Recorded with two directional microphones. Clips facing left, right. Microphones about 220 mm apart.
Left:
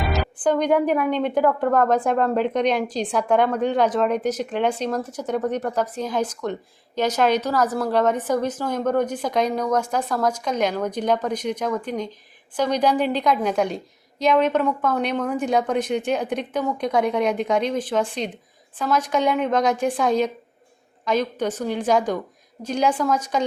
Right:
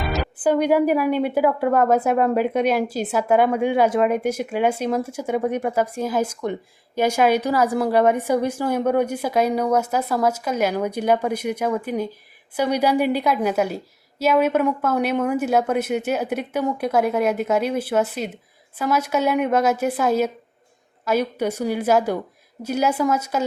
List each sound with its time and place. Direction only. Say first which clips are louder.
0.1 s a woman's voice: right 3 dB; 10° right (ahead or behind)